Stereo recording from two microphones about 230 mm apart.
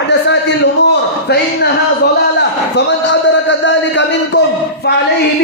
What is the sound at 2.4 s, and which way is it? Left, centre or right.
A man's voice, left.